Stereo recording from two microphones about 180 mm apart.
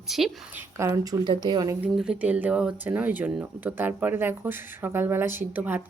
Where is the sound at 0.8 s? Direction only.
15° right (ahead or behind).